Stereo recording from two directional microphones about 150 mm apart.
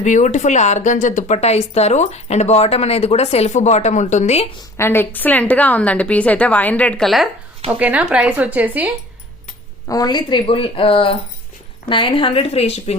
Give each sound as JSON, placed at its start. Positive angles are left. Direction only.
{"t": 0.0, "sound": "speech", "side_deg": 55}
{"t": 4.8, "sound": "a woman's voice", "side_deg": 15}
{"t": 9.8, "sound": "speech", "side_deg": 25}